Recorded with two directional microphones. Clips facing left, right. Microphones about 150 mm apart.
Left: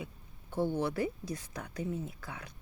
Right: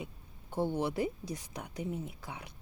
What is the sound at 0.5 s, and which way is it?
Speech, 15° right (ahead or behind).